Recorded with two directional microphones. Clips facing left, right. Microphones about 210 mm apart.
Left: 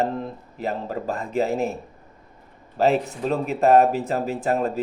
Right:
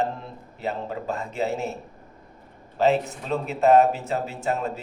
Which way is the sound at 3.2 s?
55° left (ahead or behind).